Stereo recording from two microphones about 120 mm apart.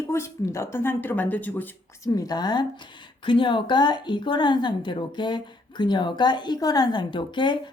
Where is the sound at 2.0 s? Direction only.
30° left (ahead or behind).